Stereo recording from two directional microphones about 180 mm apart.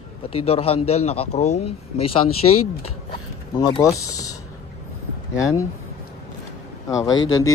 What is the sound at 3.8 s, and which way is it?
A man's voice, 20° left (ahead or behind).